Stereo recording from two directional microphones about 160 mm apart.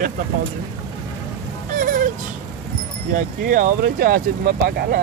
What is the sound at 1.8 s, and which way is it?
Music, 55° right (ahead or behind).